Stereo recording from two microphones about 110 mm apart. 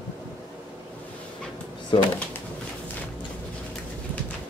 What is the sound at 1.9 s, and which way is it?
Speech, 65° left (ahead or behind).